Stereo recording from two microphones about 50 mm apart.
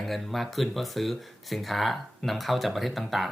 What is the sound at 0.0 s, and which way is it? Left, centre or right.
Speech, centre.